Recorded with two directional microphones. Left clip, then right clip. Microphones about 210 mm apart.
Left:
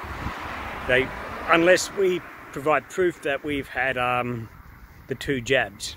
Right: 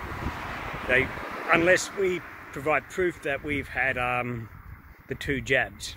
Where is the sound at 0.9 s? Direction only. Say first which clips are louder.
Left 2 dB; 10° left (ahead or behind).